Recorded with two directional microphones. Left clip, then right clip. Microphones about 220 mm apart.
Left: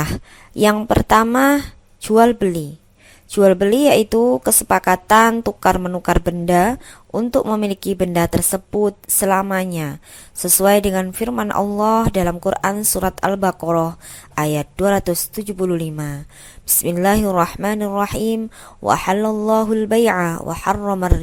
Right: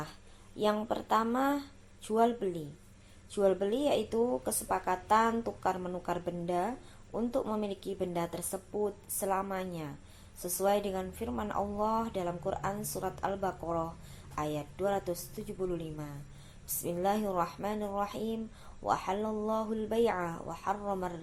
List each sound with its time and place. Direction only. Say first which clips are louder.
0.6 s a woman's voice: left 16 dB; 45° left (ahead or behind)